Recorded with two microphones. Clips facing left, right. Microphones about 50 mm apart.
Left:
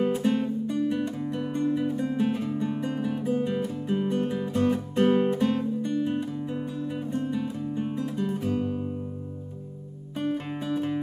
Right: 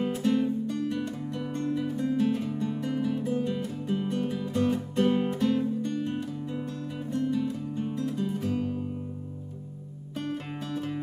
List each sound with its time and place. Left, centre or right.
0.0 s music: centre
4.6 s music: centre
4.9 s music: centre
10.1 s music: centre